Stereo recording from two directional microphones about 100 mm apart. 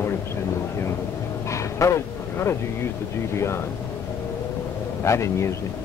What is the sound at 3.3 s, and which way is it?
Speech, 25° left (ahead or behind).